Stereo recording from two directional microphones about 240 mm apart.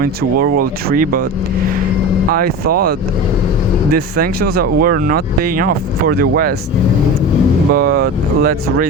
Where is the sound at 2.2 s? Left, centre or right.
Right.